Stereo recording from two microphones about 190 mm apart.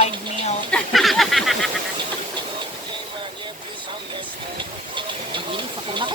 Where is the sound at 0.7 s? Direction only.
Centre (ahead or behind).